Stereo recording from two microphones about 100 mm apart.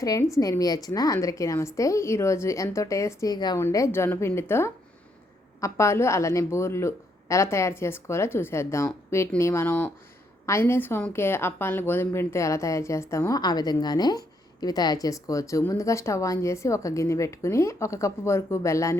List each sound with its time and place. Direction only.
0.0 s a woman's voice: 35° left (ahead or behind)
3.3 s a woman's voice: 45° left (ahead or behind)
3.6 s a woman's voice: 30° left (ahead or behind)
13.4 s a woman's voice: 45° left (ahead or behind)